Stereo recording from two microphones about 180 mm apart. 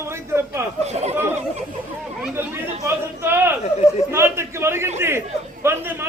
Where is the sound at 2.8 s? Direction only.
15° right (ahead or behind).